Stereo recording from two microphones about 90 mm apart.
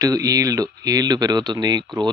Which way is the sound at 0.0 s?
40° right (ahead or behind).